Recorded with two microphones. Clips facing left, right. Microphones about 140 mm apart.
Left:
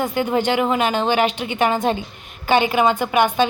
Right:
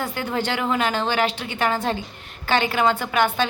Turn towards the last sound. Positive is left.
turn(degrees=15)  # may be behind; listen again after turning